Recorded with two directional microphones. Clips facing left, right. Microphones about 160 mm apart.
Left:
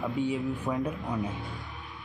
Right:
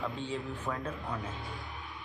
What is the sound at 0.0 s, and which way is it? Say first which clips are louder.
Speech: left 7 dB; 10° left (ahead or behind).